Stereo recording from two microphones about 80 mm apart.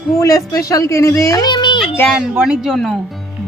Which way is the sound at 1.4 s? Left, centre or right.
Left.